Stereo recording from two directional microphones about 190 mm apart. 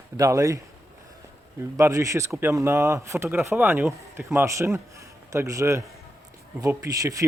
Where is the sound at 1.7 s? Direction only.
15° right (ahead or behind).